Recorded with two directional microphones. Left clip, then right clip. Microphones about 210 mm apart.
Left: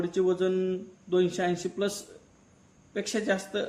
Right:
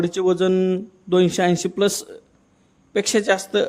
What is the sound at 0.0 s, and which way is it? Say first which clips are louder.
A woman's voice: right 7 dB; 50° right (ahead or behind).